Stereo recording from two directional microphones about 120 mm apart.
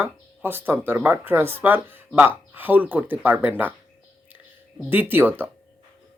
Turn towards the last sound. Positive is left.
turn(degrees=-15)  # may be behind; listen again after turning